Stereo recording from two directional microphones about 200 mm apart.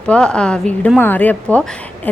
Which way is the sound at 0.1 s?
5° left (ahead or behind).